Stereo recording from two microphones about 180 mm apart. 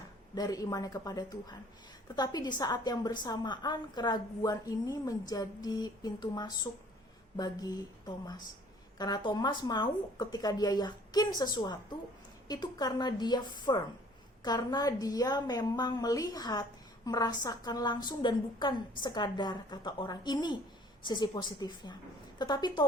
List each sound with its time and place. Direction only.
0.3 s a woman's voice: 20° left (ahead or behind)